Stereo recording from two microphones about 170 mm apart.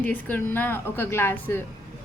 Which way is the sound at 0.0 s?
10° left (ahead or behind).